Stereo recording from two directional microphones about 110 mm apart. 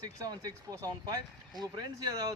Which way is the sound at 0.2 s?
35° right (ahead or behind).